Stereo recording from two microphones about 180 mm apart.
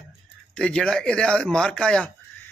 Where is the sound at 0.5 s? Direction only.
5° left (ahead or behind).